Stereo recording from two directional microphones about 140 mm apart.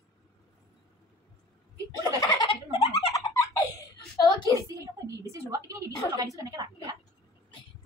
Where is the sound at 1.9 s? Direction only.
25° left (ahead or behind).